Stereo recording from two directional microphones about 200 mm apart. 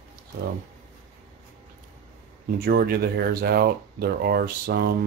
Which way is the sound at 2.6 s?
50° right (ahead or behind).